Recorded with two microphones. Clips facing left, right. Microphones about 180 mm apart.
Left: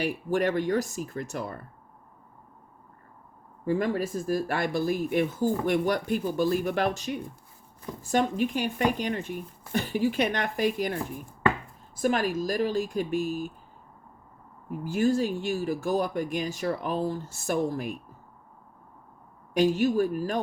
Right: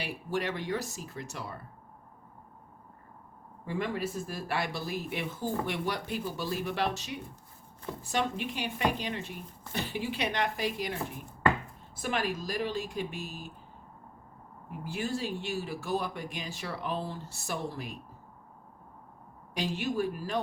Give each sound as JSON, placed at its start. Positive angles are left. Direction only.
{"t": 0.0, "sound": "speech", "side_deg": 45}
{"t": 3.7, "sound": "speech", "side_deg": 40}
{"t": 12.0, "sound": "speech", "side_deg": 45}
{"t": 14.7, "sound": "speech", "side_deg": 45}
{"t": 19.5, "sound": "speech", "side_deg": 45}